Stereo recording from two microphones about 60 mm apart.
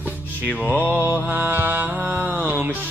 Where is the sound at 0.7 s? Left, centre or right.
Right.